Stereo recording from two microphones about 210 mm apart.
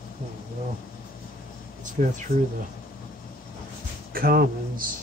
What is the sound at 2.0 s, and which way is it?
Speech, 35° right (ahead or behind).